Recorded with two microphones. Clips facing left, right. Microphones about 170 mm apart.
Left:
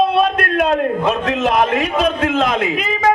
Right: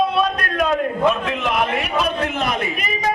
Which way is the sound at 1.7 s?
90° left.